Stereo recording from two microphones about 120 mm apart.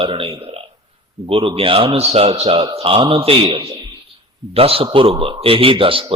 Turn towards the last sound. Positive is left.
turn(degrees=-50)  # may be behind; listen again after turning